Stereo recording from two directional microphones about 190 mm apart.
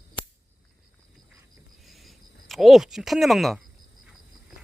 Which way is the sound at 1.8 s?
Centre (ahead or behind).